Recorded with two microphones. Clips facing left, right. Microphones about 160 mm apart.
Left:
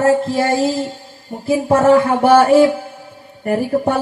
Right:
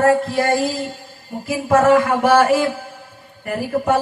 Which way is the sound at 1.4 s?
35° left (ahead or behind).